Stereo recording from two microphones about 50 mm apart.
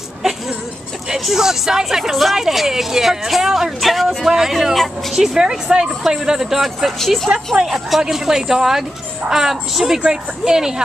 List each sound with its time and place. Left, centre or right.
1.1 s speech: centre
7.3 s speech: right
7.6 s speech: centre